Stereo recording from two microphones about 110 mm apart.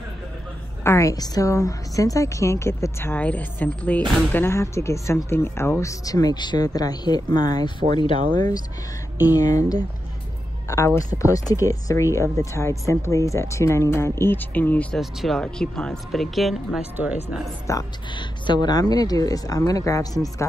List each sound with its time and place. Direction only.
0.8 s a woman's voice: 30° left (ahead or behind); by 8.2 s 45° left (ahead or behind)
9.3 s speech: 35° left (ahead or behind)
11.0 s a woman's voice: 30° left (ahead or behind); by 15.0 s 15° left (ahead or behind)
15.0 s speech: centre (ahead or behind)
16.9 s speech: 15° right (ahead or behind)
17.7 s a woman's voice: 25° left (ahead or behind)
18.1 s speech: 40° left (ahead or behind)